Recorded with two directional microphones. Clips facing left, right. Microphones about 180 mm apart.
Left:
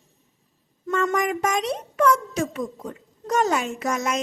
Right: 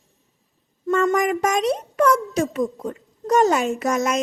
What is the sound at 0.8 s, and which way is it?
A child's voice, 40° right (ahead or behind).